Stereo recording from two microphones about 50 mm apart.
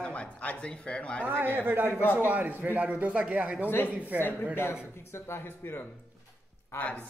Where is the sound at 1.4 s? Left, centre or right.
Right.